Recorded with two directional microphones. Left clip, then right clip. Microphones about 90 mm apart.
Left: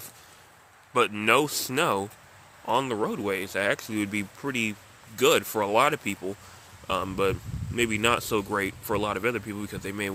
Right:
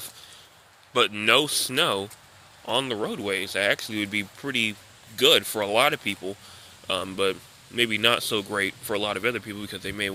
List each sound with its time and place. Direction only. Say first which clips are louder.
0.9 s speech: right 2 dB; 45° left (ahead or behind)
1.8 s speech: even; 40° left (ahead or behind)
8.2 s speech: right 1 dB; 50° left (ahead or behind)